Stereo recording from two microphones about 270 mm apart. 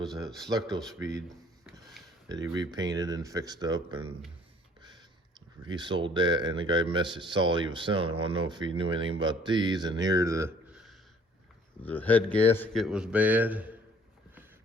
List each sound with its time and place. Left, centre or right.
0.4 s speech: centre
0.8 s a man's voice: centre
2.3 s speech: centre
5.6 s a man's voice: centre